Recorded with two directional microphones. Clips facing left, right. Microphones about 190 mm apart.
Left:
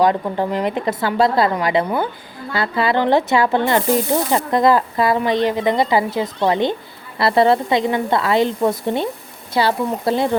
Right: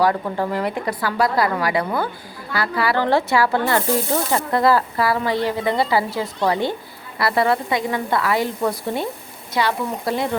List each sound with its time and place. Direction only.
0.0 s speech: 20° left (ahead or behind)